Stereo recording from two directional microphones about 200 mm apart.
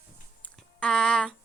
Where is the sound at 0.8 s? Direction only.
5° left (ahead or behind).